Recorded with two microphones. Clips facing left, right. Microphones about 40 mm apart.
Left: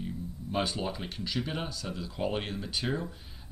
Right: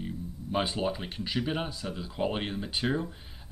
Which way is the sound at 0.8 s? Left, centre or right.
Centre.